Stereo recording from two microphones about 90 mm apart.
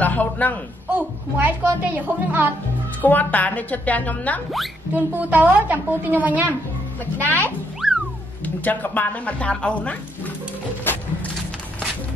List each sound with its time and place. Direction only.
0.0 s a woman's voice: 15° left (ahead or behind)
0.9 s a woman's voice: 20° right (ahead or behind)
3.0 s a woman's voice: 20° left (ahead or behind)
4.9 s a woman's voice: 20° right (ahead or behind)
7.2 s speech: 20° left (ahead or behind)
7.8 s music: 5° right (ahead or behind)
8.6 s a woman's voice: 20° left (ahead or behind)